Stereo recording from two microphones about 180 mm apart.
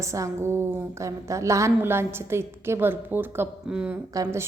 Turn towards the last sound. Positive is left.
turn(degrees=-15)  # may be behind; listen again after turning